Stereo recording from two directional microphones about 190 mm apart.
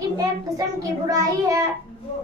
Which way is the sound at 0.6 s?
20° right (ahead or behind).